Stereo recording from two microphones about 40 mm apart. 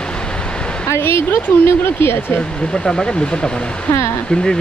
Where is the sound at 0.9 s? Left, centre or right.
Left.